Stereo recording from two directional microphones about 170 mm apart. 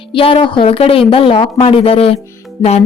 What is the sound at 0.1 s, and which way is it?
A woman's voice, 30° left (ahead or behind).